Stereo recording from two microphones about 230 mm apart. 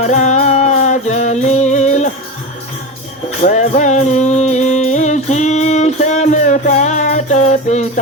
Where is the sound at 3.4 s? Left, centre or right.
Left.